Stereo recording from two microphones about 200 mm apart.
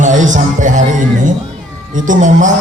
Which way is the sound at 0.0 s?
40° right (ahead or behind).